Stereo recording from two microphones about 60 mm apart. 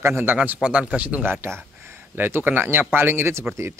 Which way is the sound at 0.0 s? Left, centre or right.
Right.